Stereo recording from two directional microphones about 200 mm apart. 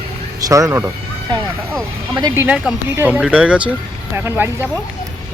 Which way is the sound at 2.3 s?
10° right (ahead or behind).